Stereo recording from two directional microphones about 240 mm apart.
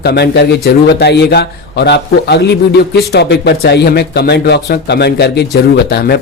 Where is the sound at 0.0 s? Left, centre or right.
Left.